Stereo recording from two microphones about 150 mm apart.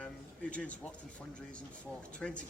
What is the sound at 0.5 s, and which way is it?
Speech, 10° left (ahead or behind).